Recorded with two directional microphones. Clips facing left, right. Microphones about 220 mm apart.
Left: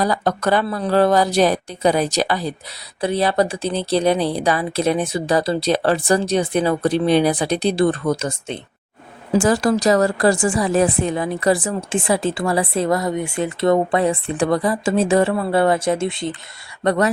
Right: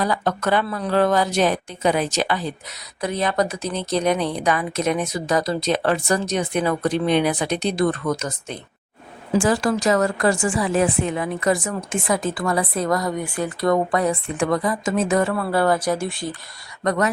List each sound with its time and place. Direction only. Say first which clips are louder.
0.0 s speech: left 3 dB; 35° left (ahead or behind)